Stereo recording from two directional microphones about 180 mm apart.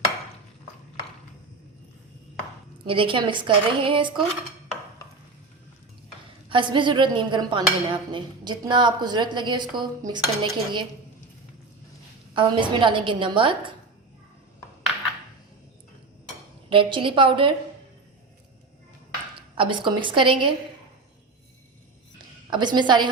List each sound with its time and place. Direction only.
2.8 s speech: 30° right (ahead or behind)
6.5 s speech: 25° right (ahead or behind)
12.3 s speech: 25° right (ahead or behind)
16.6 s speech: 30° right (ahead or behind)
19.5 s speech: 25° right (ahead or behind)
22.4 s speech: 25° right (ahead or behind)